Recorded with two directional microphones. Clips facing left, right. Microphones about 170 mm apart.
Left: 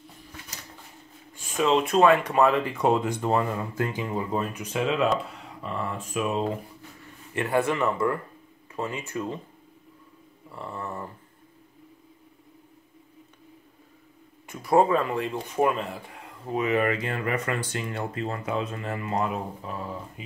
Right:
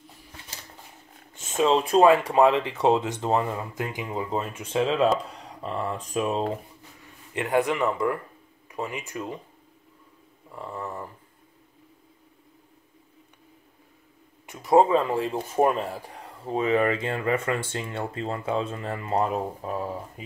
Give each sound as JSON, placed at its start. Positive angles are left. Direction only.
{"t": 1.3, "sound": "speech", "side_deg": -25}
{"t": 7.3, "sound": "speech", "side_deg": -15}
{"t": 10.5, "sound": "speech", "side_deg": -15}
{"t": 14.4, "sound": "speech", "side_deg": -20}